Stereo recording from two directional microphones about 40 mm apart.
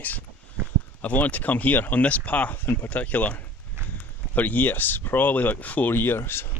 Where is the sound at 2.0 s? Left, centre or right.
Left.